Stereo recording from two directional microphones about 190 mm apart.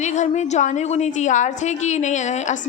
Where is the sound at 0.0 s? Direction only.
40° left (ahead or behind).